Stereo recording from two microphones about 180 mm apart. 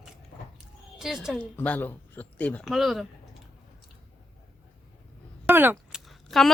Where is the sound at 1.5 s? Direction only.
10° left (ahead or behind).